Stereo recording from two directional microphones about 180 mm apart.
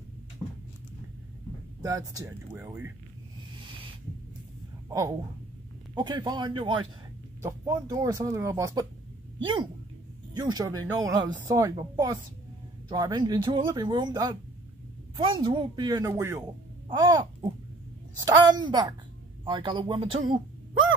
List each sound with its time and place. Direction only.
1.8 s speech: 20° right (ahead or behind)
3.5 s owl: 25° right (ahead or behind)
4.8 s a sound: 20° right (ahead or behind)
5.9 s speech: 25° right (ahead or behind)
12.8 s speech: 20° right (ahead or behind)
16.9 s a sound: 25° right (ahead or behind)
18.2 s speech: 25° right (ahead or behind)